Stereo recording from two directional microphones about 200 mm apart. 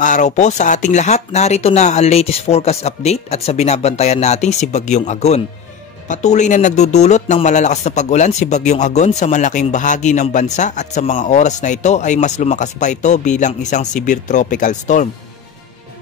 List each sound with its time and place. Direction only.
0.0 s speech: 40° left (ahead or behind)